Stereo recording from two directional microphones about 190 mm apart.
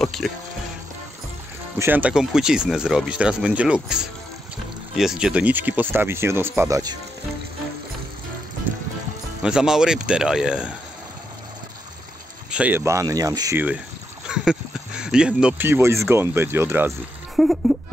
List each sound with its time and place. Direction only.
0.0 s speech: centre (ahead or behind)
1.8 s speech: 10° right (ahead or behind)
9.4 s speech: 5° right (ahead or behind)
12.4 s speech: 5° right (ahead or behind)
17.4 s a sound: centre (ahead or behind)